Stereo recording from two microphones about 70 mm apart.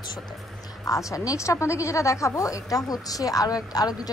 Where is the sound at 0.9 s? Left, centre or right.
Left.